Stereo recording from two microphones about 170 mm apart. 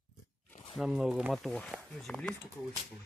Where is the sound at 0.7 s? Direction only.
Centre (ahead or behind).